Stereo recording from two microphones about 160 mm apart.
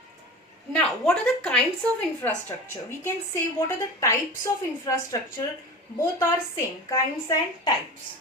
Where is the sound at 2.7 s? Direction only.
15° left (ahead or behind).